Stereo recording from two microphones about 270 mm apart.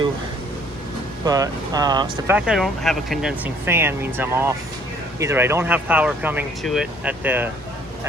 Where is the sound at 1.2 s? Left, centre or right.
Centre.